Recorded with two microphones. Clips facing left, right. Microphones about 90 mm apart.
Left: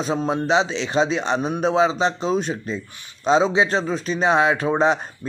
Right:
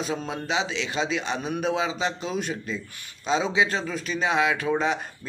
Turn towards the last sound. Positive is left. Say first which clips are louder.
# left 6 dB
turn(degrees=35)  # may be behind; listen again after turning